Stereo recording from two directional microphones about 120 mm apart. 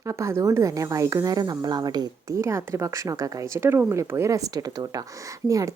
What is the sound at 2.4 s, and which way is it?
Speech, 20° right (ahead or behind).